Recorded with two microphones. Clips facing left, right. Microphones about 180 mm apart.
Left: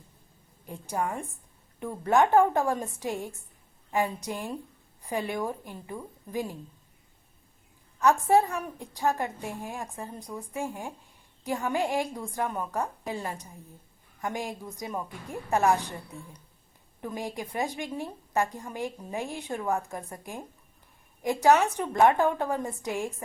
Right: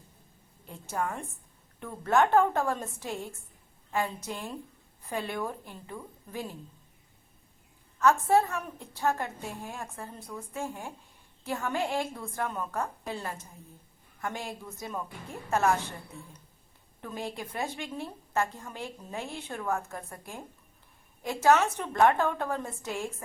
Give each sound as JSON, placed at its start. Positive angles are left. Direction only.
{"t": 0.7, "sound": "a woman's voice", "side_deg": 15}
{"t": 7.9, "sound": "a woman's voice", "side_deg": 15}